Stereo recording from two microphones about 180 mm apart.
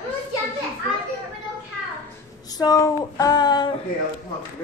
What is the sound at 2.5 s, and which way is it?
Child singing, 20° left (ahead or behind).